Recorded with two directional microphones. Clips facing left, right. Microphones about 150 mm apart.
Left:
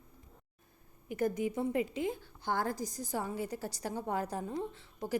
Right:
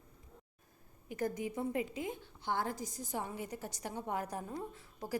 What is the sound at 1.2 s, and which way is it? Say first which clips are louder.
A woman's voice: left 4 dB; 25° left (ahead or behind).